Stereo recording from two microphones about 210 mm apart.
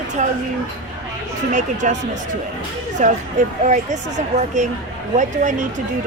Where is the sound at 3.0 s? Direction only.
35° right (ahead or behind).